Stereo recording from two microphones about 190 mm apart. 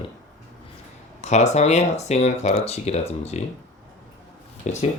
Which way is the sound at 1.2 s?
35° left (ahead or behind).